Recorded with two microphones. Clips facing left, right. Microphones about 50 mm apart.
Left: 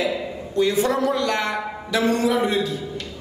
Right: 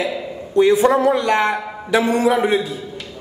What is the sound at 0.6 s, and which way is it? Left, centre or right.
A man's voice, right.